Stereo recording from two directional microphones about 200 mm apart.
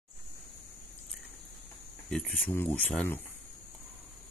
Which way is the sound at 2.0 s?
5° left (ahead or behind).